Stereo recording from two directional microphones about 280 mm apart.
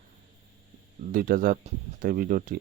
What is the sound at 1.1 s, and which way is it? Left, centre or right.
Speech, right.